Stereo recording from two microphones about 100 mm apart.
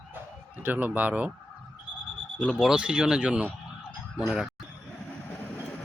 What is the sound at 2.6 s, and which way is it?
Speech, 5° right (ahead or behind).